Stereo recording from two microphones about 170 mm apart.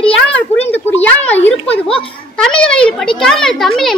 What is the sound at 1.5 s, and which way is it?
Speech, 35° left (ahead or behind).